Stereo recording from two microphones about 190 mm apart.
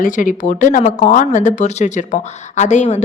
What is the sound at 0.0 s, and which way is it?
A woman's voice, 45° left (ahead or behind).